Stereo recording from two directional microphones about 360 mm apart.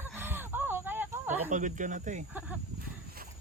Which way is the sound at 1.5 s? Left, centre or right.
Right.